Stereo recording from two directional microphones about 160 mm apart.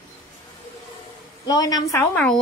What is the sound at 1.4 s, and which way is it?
Speech, 25° left (ahead or behind).